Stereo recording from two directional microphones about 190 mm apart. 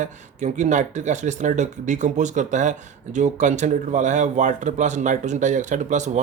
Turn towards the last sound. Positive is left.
turn(degrees=-40)  # may be behind; listen again after turning